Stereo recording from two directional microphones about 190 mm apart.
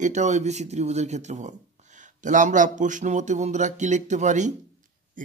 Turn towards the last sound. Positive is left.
turn(degrees=-40)  # may be behind; listen again after turning